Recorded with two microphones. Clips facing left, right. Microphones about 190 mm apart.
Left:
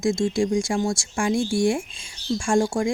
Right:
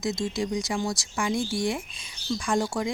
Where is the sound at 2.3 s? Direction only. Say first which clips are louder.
Left 5 dB; 50° left (ahead or behind).